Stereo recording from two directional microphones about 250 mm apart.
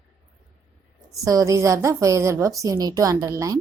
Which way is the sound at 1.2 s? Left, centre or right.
Centre.